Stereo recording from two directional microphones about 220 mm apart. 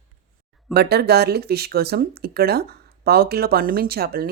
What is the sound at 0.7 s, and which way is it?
Speech, 45° right (ahead or behind).